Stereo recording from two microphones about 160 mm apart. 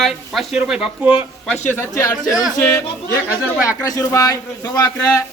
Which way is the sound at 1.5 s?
15° left (ahead or behind).